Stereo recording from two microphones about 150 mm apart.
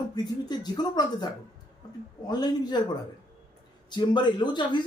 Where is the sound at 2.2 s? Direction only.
25° left (ahead or behind).